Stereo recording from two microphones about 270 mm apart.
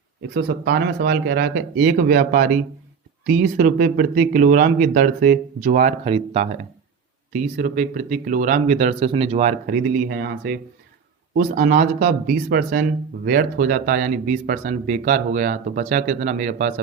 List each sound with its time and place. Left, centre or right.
0.2 s speech: right